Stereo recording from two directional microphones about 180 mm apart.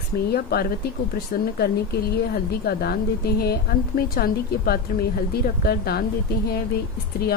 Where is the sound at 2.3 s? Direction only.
60° left (ahead or behind).